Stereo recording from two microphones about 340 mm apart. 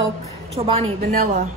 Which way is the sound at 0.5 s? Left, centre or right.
Centre.